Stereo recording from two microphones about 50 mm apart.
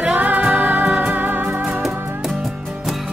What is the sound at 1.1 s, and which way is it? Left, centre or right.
Music, right.